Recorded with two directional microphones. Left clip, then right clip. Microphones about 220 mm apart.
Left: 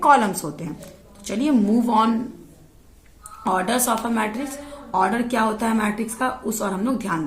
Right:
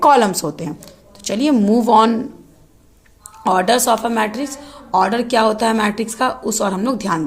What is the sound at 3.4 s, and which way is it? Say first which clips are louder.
Speech: right 7 dB; 40° right (ahead or behind).